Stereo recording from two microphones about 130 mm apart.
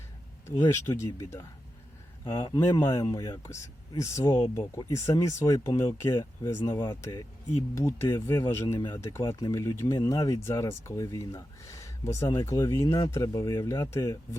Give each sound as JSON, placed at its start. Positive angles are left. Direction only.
{"t": 0.9, "sound": "speech", "side_deg": 20}